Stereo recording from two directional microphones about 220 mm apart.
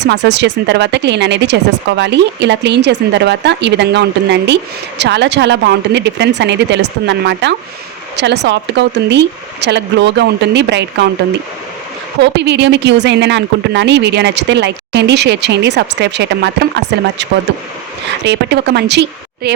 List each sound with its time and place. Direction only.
0.0 s speech: 50° right (ahead or behind)
12.2 s speech: 50° right (ahead or behind)
18.3 s speech: 50° right (ahead or behind)